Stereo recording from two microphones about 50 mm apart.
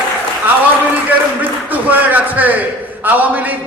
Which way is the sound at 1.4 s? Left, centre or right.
Right.